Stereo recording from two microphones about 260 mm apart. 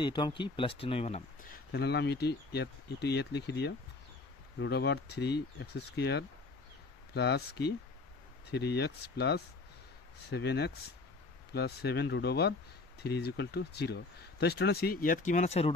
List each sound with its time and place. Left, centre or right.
0.0 s speech: centre
1.7 s speech: left